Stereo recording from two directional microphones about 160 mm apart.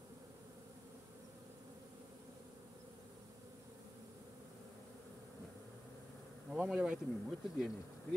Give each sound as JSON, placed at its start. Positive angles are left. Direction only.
{"t": 6.5, "sound": "speech", "side_deg": -5}